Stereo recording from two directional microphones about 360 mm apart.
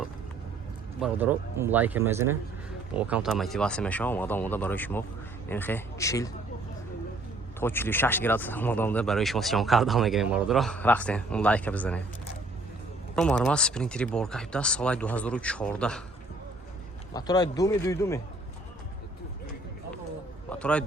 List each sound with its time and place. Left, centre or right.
1.0 s a man's voice: centre
7.6 s speech: centre
13.1 s speech: centre
17.2 s speech: centre
20.5 s a man's voice: centre